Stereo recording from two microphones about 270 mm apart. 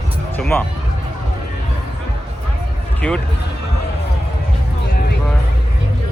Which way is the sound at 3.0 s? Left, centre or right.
Centre.